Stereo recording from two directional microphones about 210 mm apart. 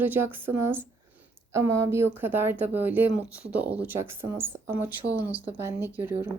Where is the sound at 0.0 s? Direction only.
10° right (ahead or behind).